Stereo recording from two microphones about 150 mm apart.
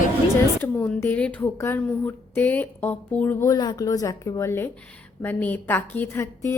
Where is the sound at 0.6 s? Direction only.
15° left (ahead or behind).